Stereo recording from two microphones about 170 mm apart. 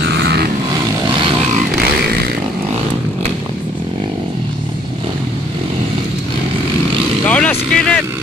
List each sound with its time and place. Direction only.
0.2 s vehicle: 70° right (ahead or behind)
7.2 s vehicle: 10° left (ahead or behind)